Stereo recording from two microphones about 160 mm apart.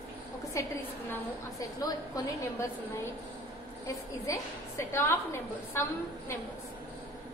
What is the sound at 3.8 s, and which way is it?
A woman's voice, 20° left (ahead or behind).